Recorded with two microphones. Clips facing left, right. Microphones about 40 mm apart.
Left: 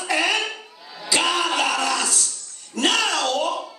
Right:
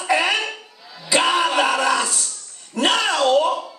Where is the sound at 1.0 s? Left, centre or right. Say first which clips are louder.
Right 3 dB; centre.